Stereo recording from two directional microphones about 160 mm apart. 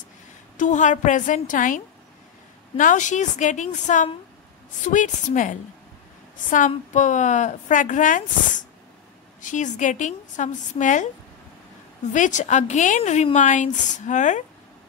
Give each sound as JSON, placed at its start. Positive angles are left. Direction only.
{"t": 0.6, "sound": "a woman's voice", "side_deg": 50}
{"t": 2.8, "sound": "a woman's voice", "side_deg": 50}
{"t": 9.4, "sound": "a woman's voice", "side_deg": 50}
{"t": 12.1, "sound": "a woman's voice", "side_deg": 50}